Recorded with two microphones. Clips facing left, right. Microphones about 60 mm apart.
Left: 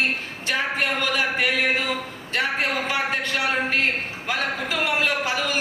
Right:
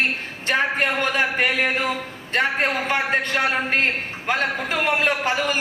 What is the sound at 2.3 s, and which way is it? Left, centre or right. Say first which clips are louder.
A man's voice: right 3 dB; right.